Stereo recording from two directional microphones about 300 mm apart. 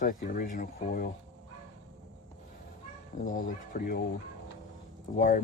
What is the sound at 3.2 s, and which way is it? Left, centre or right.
Speech, left.